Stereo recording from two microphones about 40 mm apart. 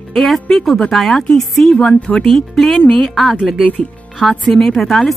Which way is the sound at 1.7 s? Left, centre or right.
Left.